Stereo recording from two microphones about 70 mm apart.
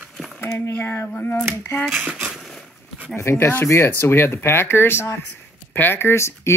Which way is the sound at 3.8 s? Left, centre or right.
Left.